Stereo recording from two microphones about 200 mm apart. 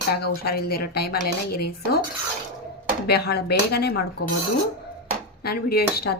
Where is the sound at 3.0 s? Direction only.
55° left (ahead or behind).